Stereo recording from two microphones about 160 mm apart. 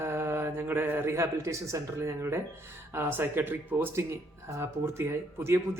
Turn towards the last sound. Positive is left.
turn(degrees=-15)  # may be behind; listen again after turning